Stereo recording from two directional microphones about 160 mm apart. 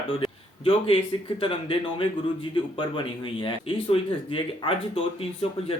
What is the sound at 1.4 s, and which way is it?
A man's voice, 35° left (ahead or behind).